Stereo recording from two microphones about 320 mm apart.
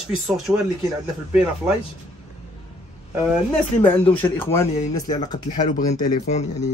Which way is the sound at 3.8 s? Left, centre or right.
Centre.